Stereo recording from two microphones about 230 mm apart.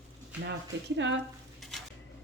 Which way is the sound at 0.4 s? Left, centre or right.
Right.